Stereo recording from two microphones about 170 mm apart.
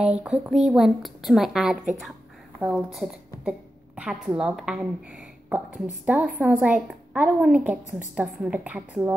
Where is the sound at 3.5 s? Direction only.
5° right (ahead or behind).